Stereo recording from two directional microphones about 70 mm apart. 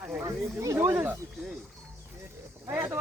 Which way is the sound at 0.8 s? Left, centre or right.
Right.